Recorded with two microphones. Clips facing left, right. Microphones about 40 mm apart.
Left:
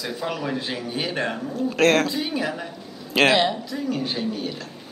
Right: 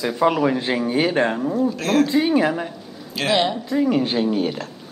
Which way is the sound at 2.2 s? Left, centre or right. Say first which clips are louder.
Right 8 dB; right.